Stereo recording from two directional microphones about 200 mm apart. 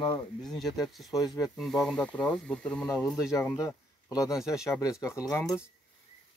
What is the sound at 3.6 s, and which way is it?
Speech, 15° left (ahead or behind).